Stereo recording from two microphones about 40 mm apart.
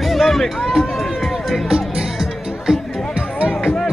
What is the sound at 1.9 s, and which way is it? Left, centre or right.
Music, centre.